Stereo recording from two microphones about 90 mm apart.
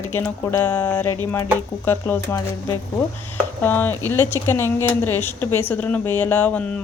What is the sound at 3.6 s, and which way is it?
A woman's voice, 20° left (ahead or behind).